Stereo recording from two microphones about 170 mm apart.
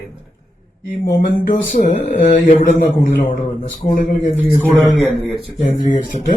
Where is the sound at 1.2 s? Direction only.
55° left (ahead or behind).